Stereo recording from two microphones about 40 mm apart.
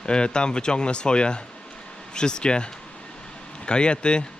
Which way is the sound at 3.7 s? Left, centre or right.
Left.